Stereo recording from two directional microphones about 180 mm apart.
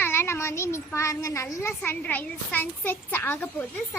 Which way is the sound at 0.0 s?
15° left (ahead or behind).